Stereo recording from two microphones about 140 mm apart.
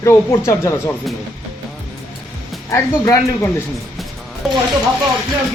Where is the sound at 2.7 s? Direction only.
20° left (ahead or behind).